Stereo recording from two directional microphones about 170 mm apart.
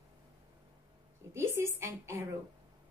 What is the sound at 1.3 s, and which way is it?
Speech, 15° right (ahead or behind).